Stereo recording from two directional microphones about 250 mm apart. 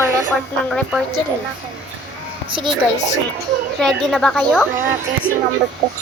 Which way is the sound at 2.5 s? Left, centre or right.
Centre.